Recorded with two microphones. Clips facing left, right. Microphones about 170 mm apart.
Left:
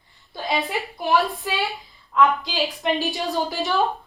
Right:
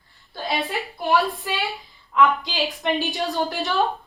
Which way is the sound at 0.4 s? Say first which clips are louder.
Left 1 dB; 15° left (ahead or behind).